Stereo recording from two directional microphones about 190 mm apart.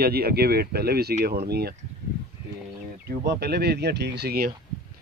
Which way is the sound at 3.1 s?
60° right (ahead or behind).